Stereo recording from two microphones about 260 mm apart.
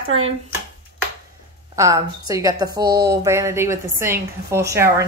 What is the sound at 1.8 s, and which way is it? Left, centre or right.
A woman's voice, centre.